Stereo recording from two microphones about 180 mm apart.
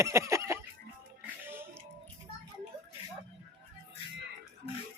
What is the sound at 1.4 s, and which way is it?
Music, 10° right (ahead or behind).